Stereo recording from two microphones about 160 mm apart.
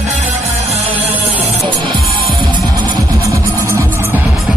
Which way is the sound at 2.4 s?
30° right (ahead or behind).